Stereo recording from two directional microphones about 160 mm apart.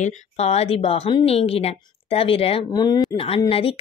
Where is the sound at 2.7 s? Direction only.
25° left (ahead or behind).